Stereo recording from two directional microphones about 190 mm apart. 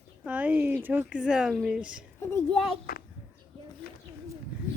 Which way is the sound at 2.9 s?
50° left (ahead or behind).